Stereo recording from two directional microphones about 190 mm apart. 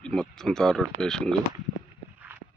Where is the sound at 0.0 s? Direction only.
5° left (ahead or behind).